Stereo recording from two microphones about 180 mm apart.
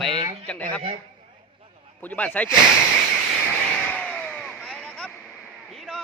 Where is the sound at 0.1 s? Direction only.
30° right (ahead or behind).